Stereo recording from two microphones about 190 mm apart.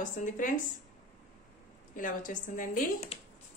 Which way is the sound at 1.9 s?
45° left (ahead or behind).